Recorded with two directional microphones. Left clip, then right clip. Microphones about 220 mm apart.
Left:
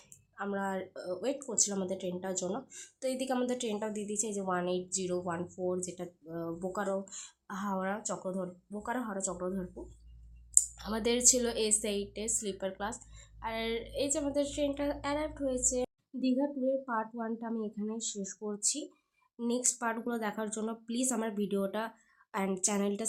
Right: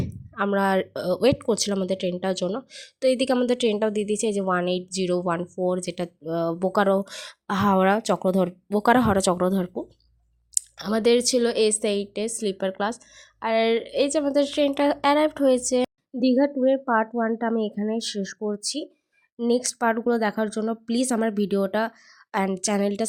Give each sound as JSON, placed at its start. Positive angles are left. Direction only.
{"t": 0.3, "sound": "speech", "side_deg": -40}